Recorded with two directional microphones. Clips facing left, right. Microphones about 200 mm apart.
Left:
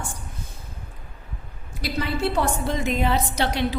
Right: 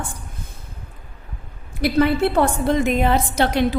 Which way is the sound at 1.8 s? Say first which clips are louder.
Right 8 dB; 55° right (ahead or behind).